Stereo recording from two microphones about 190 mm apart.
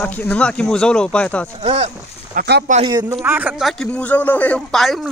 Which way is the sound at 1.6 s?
35° right (ahead or behind).